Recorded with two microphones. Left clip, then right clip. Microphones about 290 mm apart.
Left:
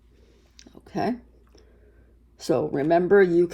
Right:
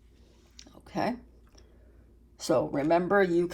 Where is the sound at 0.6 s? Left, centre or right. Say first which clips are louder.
Left 3 dB; left.